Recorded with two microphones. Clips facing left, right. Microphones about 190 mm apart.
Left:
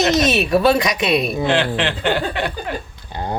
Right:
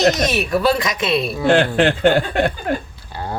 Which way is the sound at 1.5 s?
45° right (ahead or behind).